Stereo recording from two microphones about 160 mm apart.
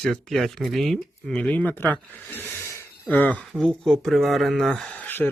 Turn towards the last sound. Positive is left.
turn(degrees=10)  # may be behind; listen again after turning